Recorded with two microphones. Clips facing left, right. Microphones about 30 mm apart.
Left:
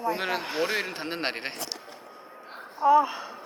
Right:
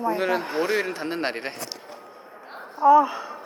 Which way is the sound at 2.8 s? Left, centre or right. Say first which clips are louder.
Right 4 dB; left.